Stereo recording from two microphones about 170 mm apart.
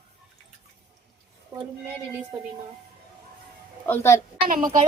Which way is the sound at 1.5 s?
20° right (ahead or behind).